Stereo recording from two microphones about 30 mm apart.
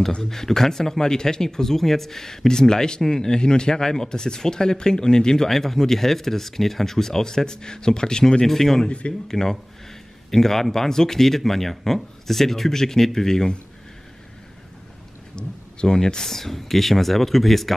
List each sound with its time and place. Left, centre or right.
0.2 s speech: centre
5.5 s speech: centre; by 8.5 s left
8.5 s speech: centre
8.8 s speech: left
9.3 s speech: centre
15.3 s a sound: left
16.3 s speech: centre